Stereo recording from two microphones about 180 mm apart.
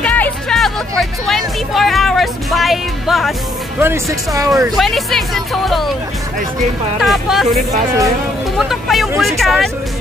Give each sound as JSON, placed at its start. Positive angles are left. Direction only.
{"t": 0.0, "sound": "music", "side_deg": 10}
{"t": 3.8, "sound": "speech", "side_deg": -15}
{"t": 4.7, "sound": "speech", "side_deg": 0}
{"t": 7.0, "sound": "speech", "side_deg": 0}